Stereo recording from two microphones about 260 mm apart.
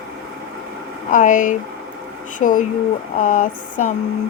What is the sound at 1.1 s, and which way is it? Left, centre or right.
Speech, left.